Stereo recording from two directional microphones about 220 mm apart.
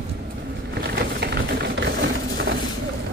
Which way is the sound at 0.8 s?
50° right (ahead or behind).